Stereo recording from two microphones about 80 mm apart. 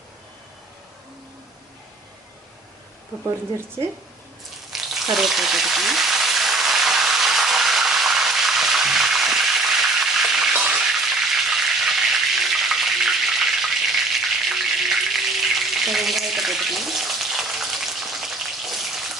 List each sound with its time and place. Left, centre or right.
4.7 s frying: centre
10.6 s a sound: centre
10.9 s frying: centre